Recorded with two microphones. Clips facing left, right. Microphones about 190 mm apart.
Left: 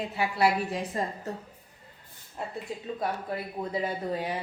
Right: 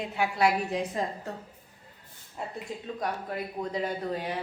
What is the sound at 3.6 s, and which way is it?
Speech, 20° left (ahead or behind).